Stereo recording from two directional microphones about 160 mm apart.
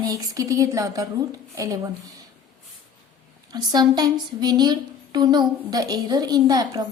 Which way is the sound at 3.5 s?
25° right (ahead or behind).